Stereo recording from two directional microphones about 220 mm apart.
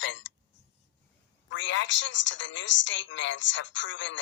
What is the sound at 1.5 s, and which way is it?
A woman's voice, 55° left (ahead or behind).